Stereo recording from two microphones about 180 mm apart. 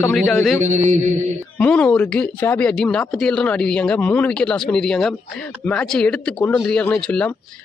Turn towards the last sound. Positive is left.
turn(degrees=10)  # may be behind; listen again after turning